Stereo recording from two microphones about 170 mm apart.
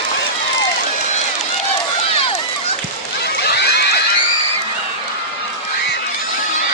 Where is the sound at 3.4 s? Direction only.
75° left (ahead or behind).